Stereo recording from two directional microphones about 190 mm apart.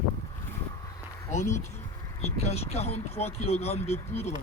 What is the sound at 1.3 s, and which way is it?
Speech, 40° left (ahead or behind).